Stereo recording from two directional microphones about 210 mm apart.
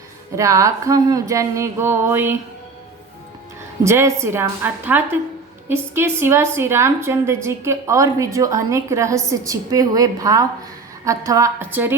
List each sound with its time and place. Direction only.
0.3 s a woman's voice: 15° right (ahead or behind)
3.8 s a woman's voice: 15° right (ahead or behind)